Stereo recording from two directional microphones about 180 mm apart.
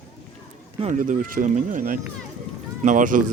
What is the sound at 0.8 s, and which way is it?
Speech, 45° right (ahead or behind).